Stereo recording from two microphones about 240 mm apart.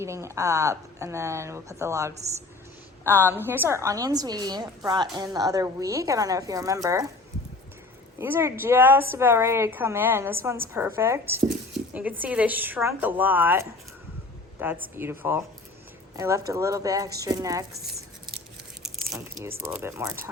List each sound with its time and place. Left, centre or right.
0.0 s a woman's voice: centre
3.2 s a woman's voice: centre
8.2 s a woman's voice: centre
17.8 s squish: right
19.4 s a woman's voice: centre